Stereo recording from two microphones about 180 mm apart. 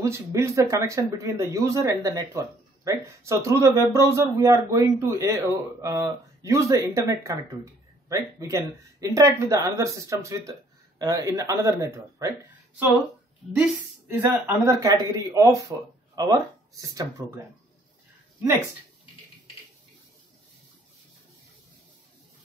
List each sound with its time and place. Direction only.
0.0 s a man's voice: 15° right (ahead or behind)
14.2 s a man's voice: 15° right (ahead or behind)